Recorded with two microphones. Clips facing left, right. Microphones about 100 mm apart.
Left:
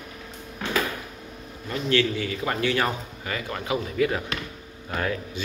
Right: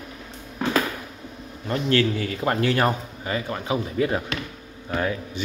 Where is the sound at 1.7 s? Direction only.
40° right (ahead or behind).